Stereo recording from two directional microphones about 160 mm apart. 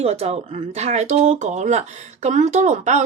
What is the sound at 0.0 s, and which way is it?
Speech, 40° right (ahead or behind).